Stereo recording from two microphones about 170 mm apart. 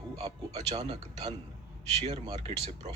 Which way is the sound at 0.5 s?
40° right (ahead or behind).